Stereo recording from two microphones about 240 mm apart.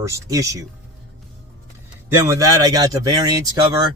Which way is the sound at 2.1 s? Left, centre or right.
Centre.